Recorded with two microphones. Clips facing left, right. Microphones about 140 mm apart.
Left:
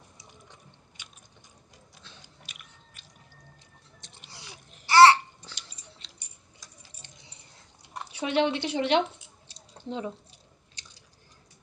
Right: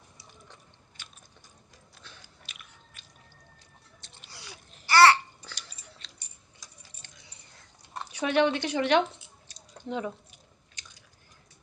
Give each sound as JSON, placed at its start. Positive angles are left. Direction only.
{"t": 2.0, "sound": "biting", "side_deg": 20}
{"t": 4.3, "sound": "babbling", "side_deg": 25}
{"t": 7.0, "sound": "a sound", "side_deg": 25}
{"t": 8.1, "sound": "speech", "side_deg": 25}
{"t": 9.5, "sound": "squish", "side_deg": 25}
{"t": 10.8, "sound": "biting", "side_deg": 35}